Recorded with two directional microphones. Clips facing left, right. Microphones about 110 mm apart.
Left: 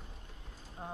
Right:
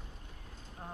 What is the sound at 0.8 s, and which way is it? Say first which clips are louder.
Speech: left 3 dB; 15° left (ahead or behind).